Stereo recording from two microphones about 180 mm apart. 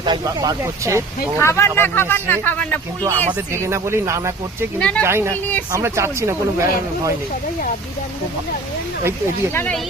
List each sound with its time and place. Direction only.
0.0 s speech: 25° right (ahead or behind)
1.4 s speech: 15° left (ahead or behind)
3.3 s speech: 15° right (ahead or behind)
4.8 s speech: 5° left (ahead or behind)
5.0 s speech: 15° right (ahead or behind)
5.3 s speech: 10° left (ahead or behind)
5.7 s speech: 15° right (ahead or behind)
9.5 s speech: 10° left (ahead or behind)